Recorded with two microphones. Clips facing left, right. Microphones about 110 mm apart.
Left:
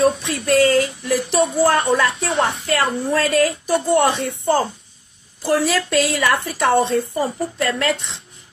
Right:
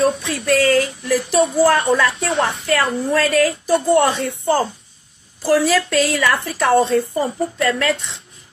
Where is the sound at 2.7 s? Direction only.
30° left (ahead or behind).